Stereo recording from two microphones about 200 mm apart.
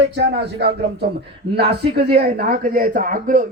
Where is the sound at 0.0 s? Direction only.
60° right (ahead or behind).